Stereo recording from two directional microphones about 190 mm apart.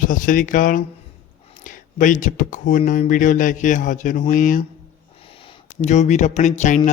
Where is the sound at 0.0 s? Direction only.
45° left (ahead or behind).